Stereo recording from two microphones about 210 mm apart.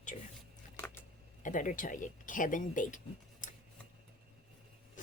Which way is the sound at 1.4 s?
40° left (ahead or behind).